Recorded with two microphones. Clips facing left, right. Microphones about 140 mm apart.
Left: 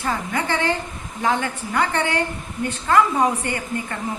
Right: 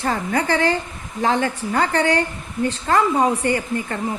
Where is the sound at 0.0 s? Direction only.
45° right (ahead or behind).